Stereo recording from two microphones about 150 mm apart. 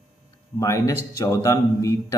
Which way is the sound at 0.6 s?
20° left (ahead or behind).